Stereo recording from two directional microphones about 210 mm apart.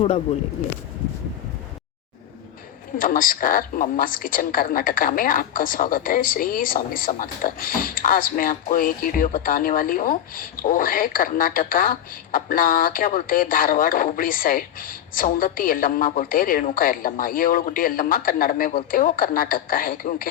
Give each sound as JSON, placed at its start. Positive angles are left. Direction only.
{"t": 0.6, "sound": "speech", "side_deg": 90}
{"t": 3.0, "sound": "a woman's voice", "side_deg": 40}